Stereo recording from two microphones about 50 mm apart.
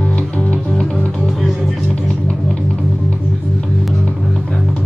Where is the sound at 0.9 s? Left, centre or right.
Centre.